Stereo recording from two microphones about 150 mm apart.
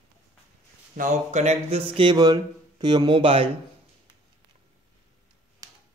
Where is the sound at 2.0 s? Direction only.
30° right (ahead or behind).